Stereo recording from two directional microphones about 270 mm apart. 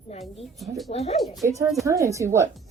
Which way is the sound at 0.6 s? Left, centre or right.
Centre.